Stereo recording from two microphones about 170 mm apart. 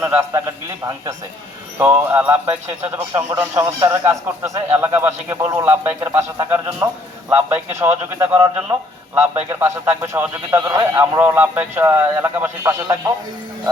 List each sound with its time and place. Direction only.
0.0 s speech: 15° right (ahead or behind)
1.8 s a man's voice: 10° right (ahead or behind)